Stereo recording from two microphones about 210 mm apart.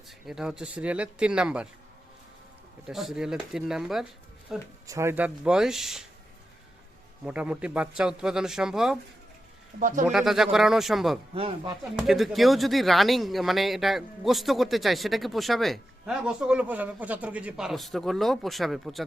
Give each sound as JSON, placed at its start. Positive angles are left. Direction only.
{"t": 0.3, "sound": "speech", "side_deg": -5}
{"t": 2.8, "sound": "speech", "side_deg": 0}
{"t": 4.9, "sound": "speech", "side_deg": -15}
{"t": 7.3, "sound": "speech", "side_deg": -5}
{"t": 9.8, "sound": "speech", "side_deg": -40}
{"t": 10.1, "sound": "speech", "side_deg": 0}
{"t": 11.3, "sound": "speech", "side_deg": -25}
{"t": 11.9, "sound": "speech", "side_deg": 0}